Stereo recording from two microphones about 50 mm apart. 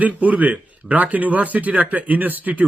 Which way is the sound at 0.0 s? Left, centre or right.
Right.